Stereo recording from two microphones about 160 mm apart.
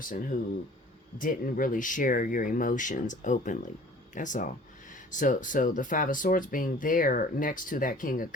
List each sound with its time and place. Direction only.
0.0 s speech: 60° left (ahead or behind)